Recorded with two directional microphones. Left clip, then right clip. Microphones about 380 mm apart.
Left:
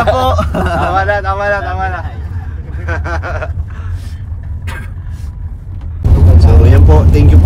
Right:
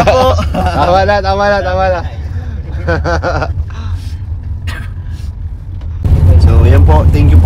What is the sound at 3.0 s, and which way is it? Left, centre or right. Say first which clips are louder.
Speech: right 6 dB; centre.